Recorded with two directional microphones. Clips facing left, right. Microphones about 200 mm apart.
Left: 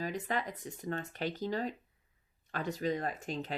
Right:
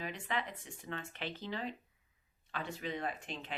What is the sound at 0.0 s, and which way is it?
Speech, 40° left (ahead or behind).